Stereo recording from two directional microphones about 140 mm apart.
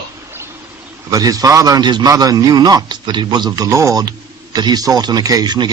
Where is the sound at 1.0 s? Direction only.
25° right (ahead or behind).